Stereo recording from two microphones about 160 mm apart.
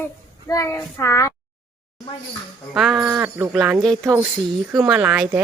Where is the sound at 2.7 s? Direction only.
Centre (ahead or behind).